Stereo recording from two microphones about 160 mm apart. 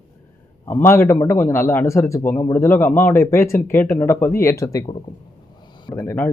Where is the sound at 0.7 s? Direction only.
15° left (ahead or behind).